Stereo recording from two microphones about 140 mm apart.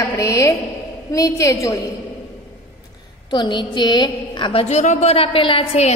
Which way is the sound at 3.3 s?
35° left (ahead or behind).